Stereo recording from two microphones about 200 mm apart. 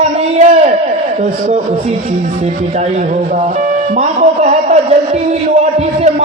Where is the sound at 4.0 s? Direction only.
35° right (ahead or behind).